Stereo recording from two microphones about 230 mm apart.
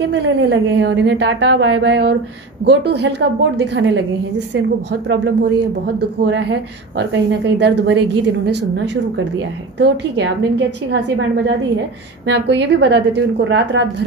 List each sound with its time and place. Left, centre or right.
0.1 s a woman's voice: right